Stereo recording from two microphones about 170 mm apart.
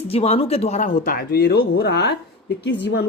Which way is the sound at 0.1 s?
35° left (ahead or behind).